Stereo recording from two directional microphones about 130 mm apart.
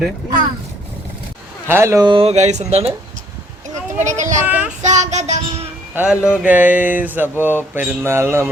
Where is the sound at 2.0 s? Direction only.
45° right (ahead or behind).